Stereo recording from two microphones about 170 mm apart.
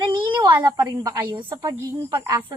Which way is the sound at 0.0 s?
25° right (ahead or behind).